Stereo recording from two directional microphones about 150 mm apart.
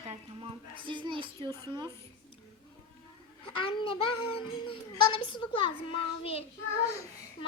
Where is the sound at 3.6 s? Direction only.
35° left (ahead or behind).